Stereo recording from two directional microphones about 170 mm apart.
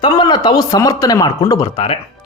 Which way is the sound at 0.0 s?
25° left (ahead or behind).